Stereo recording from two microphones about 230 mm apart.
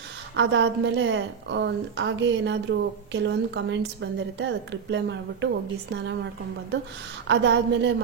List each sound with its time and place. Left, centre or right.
0.4 s a woman's voice: right
7.2 s a woman's voice: right